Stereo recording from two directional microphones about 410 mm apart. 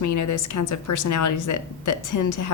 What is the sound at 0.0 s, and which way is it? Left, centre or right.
A woman's voice, left.